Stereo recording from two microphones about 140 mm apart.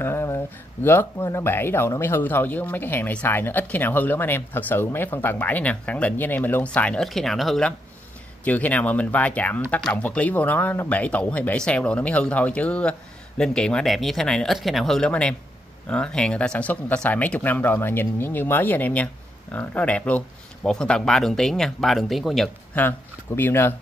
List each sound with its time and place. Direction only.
0.0 s a sound: 15° left (ahead or behind)
0.8 s speech: 15° left (ahead or behind); by 22.5 s centre (ahead or behind)
22.8 s speech: 15° left (ahead or behind)